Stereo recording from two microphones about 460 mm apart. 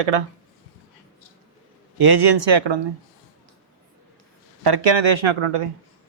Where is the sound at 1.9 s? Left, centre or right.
Right.